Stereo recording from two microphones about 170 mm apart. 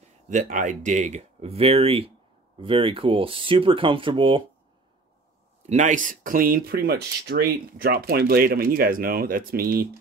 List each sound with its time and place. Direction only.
0.3 s speech: 50° right (ahead or behind); by 4.4 s 30° right (ahead or behind)
5.6 s speech: 45° right (ahead or behind); by 9.8 s 60° right (ahead or behind)